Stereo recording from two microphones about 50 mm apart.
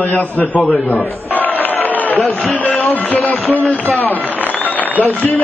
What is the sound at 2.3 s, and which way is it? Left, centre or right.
Speech, left.